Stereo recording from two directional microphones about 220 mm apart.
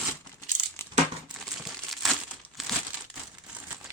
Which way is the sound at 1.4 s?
Centre (ahead or behind).